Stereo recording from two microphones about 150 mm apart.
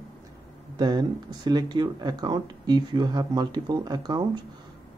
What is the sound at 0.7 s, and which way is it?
Speech, 30° right (ahead or behind).